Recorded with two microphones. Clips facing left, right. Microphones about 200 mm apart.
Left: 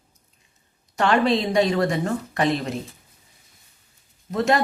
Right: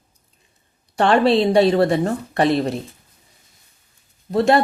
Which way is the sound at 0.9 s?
30° right (ahead or behind).